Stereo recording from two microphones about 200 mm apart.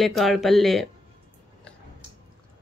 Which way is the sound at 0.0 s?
Centre (ahead or behind).